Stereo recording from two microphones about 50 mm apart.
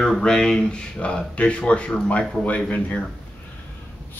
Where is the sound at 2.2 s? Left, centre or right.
Centre.